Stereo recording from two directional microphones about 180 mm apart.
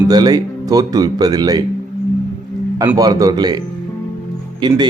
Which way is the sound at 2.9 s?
20° right (ahead or behind).